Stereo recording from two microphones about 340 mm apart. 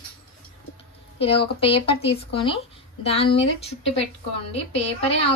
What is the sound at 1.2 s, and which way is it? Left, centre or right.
A woman's voice, centre.